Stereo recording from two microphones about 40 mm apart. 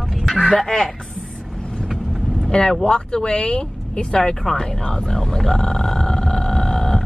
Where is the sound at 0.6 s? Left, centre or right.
Centre.